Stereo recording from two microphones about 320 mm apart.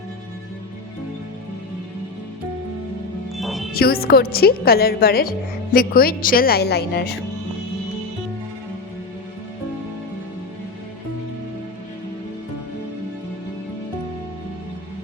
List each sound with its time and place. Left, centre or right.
3.3 s music: centre
3.7 s a woman's voice: left